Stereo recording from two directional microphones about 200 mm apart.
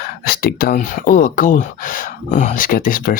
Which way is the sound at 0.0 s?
50° left (ahead or behind).